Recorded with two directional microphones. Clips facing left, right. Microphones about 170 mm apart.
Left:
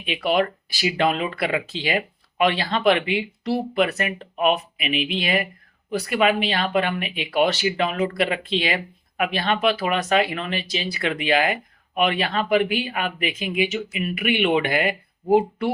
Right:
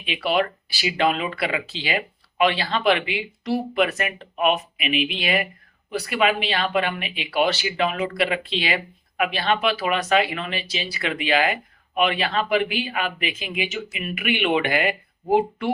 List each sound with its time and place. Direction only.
0.0 s speech: 45° left (ahead or behind)